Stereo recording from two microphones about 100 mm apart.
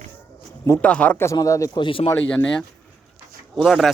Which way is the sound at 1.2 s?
30° left (ahead or behind).